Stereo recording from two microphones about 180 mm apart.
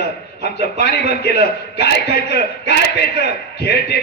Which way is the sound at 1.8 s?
65° left (ahead or behind).